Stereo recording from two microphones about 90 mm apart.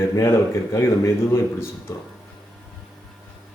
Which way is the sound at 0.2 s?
35° left (ahead or behind).